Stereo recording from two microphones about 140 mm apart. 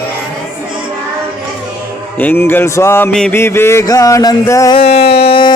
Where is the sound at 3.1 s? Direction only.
5° left (ahead or behind).